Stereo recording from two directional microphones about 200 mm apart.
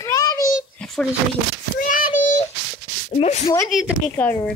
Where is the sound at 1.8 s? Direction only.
45° left (ahead or behind).